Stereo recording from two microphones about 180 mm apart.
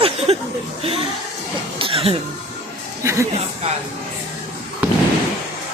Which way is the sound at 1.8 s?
30° right (ahead or behind).